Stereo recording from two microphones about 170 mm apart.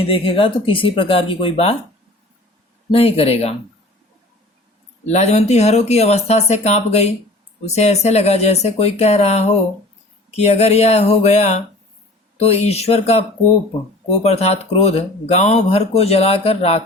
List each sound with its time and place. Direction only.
0.1 s speech: 30° left (ahead or behind)
2.9 s speech: 35° left (ahead or behind)
5.0 s speech: 40° left (ahead or behind)